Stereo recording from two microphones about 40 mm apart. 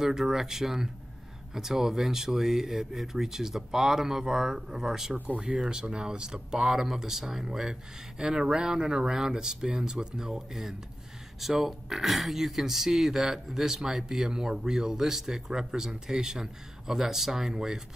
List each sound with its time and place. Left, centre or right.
0.0 s speech: centre